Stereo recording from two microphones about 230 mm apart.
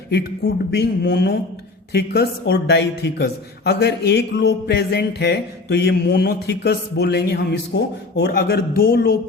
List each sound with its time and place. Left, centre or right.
0.1 s speech: left